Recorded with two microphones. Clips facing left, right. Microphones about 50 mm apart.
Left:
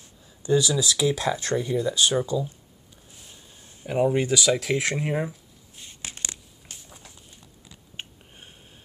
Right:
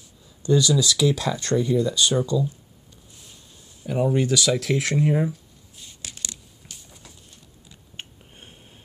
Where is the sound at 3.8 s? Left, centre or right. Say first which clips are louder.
Even; centre.